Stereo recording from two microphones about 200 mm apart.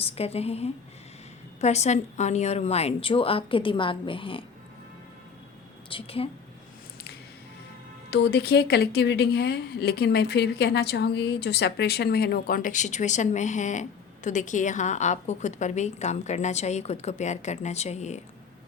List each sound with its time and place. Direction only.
0.0 s a woman's voice: 30° left (ahead or behind)
5.9 s speech: 30° left (ahead or behind)
8.1 s a woman's voice: 55° left (ahead or behind); by 18.2 s 35° left (ahead or behind)